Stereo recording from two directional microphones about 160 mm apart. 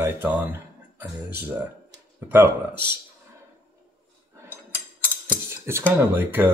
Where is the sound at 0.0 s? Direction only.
10° right (ahead or behind).